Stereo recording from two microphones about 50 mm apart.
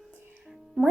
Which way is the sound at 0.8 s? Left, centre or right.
Centre.